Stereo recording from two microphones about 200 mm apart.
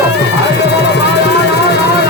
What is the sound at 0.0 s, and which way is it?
Music, 55° left (ahead or behind).